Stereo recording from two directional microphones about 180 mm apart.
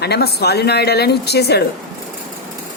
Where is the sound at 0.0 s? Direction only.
65° left (ahead or behind).